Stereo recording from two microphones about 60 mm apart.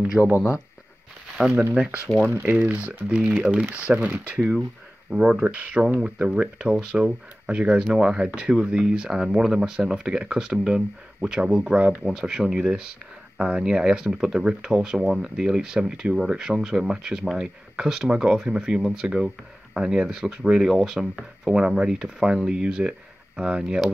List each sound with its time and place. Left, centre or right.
0.2 s speech: centre
1.5 s speech: right
5.1 s speech: centre
5.4 s speech: right
20.7 s speech: centre